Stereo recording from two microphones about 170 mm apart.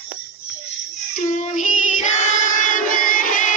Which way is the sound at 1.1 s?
50° left (ahead or behind).